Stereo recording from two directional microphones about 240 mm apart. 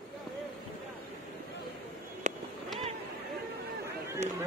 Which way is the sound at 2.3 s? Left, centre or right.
Right.